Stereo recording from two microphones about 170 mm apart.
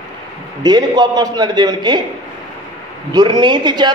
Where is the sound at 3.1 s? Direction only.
25° right (ahead or behind).